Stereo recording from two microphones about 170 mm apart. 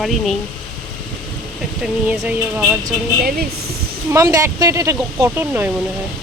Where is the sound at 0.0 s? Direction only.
Centre (ahead or behind).